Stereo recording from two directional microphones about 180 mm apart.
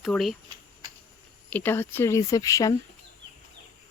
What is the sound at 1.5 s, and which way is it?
Speech, 10° left (ahead or behind).